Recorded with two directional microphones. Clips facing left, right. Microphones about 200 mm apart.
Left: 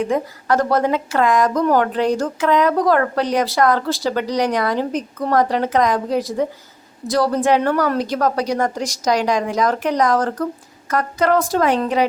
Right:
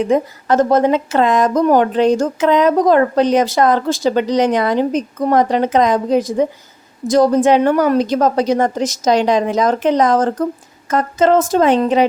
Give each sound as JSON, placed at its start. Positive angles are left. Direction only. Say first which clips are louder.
{"t": 0.0, "sound": "speech", "louder": "right 5 dB", "side_deg": -20}